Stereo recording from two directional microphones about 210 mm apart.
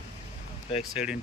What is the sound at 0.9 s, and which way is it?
Speech, 5° right (ahead or behind).